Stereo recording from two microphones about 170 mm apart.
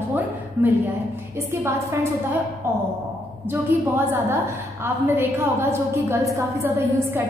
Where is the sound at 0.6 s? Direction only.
10° right (ahead or behind).